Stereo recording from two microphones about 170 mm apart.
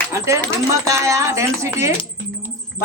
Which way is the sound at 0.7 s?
20° right (ahead or behind).